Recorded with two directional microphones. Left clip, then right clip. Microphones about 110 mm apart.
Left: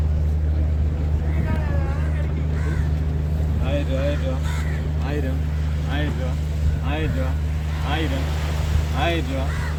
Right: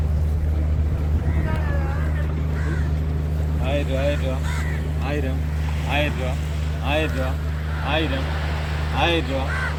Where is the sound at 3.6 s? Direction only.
30° left (ahead or behind).